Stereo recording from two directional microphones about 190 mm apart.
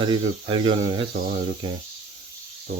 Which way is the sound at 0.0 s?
25° right (ahead or behind).